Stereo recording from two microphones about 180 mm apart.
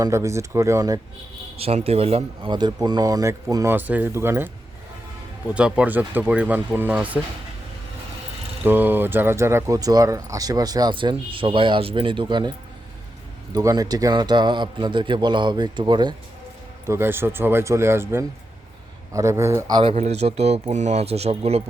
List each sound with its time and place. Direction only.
0.0 s speech: 15° right (ahead or behind)
1.5 s speech: 35° right (ahead or behind); by 7.2 s 10° right (ahead or behind)
8.6 s speech: 10° right (ahead or behind); by 12.5 s 25° right (ahead or behind)
13.5 s speech: 20° right (ahead or behind)
16.8 s speech: 15° right (ahead or behind); by 21.6 s 35° right (ahead or behind)